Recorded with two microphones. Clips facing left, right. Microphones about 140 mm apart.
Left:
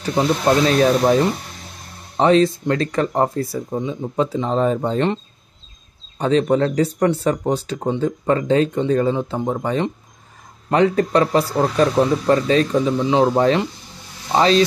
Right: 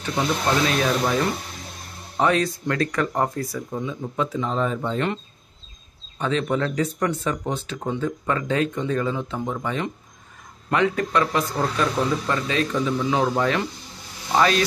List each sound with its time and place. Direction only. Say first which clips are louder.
0.0 s a man's voice: left 6 dB; 35° left (ahead or behind)